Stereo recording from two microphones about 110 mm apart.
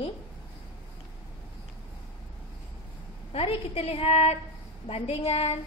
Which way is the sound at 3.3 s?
60° left (ahead or behind).